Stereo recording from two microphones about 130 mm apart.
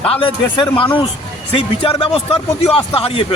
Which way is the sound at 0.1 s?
45° left (ahead or behind).